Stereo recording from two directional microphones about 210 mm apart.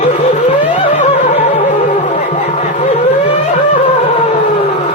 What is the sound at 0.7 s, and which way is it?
Music, 35° left (ahead or behind).